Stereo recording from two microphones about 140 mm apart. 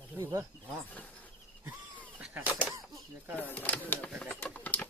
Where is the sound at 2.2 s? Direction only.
10° right (ahead or behind).